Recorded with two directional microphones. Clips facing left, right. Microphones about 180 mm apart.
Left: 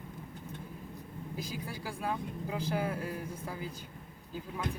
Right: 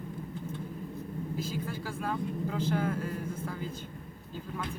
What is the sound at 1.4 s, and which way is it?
Speech, 15° left (ahead or behind).